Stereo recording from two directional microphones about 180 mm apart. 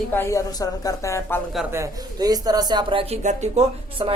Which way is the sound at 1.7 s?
20° right (ahead or behind).